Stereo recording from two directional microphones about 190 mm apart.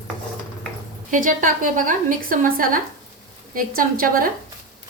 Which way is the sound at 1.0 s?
45° right (ahead or behind).